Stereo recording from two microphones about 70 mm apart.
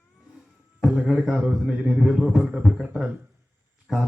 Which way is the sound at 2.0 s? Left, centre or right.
Centre.